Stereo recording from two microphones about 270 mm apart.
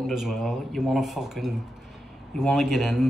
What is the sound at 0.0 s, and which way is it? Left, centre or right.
Speech, centre.